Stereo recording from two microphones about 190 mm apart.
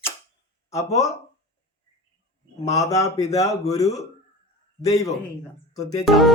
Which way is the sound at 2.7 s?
20° left (ahead or behind).